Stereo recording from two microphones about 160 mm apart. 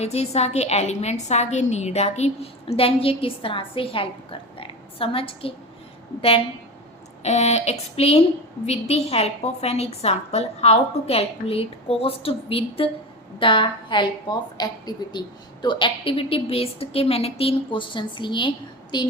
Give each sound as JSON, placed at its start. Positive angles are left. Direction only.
{"t": 0.0, "sound": "a woman's voice", "side_deg": 40}
{"t": 7.2, "sound": "a woman's voice", "side_deg": 45}